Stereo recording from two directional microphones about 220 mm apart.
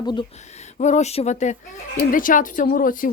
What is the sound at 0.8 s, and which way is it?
Speech, 35° left (ahead or behind).